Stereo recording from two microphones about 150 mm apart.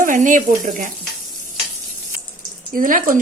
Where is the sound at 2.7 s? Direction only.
65° right (ahead or behind).